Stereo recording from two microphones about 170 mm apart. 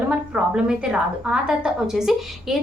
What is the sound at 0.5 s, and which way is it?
A woman's voice, 5° right (ahead or behind).